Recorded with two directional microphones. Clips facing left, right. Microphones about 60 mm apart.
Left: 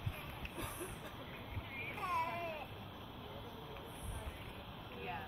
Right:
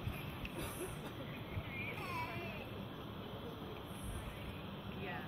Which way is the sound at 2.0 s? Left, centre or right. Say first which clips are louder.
Left 8 dB; left.